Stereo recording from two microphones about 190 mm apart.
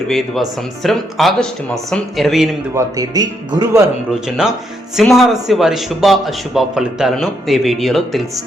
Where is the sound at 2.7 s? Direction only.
20° right (ahead or behind).